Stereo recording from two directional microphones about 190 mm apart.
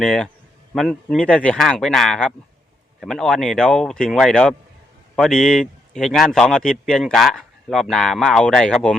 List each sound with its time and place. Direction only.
0.0 s a man's voice: 5° left (ahead or behind)